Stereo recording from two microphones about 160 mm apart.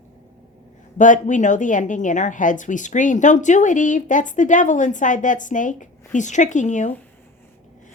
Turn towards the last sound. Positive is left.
turn(degrees=50)  # may be behind; listen again after turning